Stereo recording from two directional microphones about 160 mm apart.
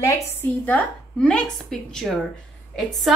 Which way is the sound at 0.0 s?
20° left (ahead or behind).